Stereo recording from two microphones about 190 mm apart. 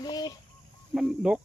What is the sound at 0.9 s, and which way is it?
Speech, centre (ahead or behind).